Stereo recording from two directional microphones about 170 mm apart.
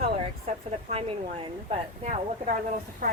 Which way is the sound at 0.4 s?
35° right (ahead or behind).